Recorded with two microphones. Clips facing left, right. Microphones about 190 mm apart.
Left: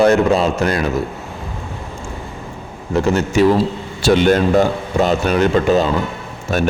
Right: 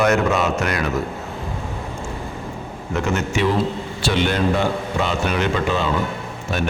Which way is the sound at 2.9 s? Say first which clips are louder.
Left 6 dB; 35° left (ahead or behind).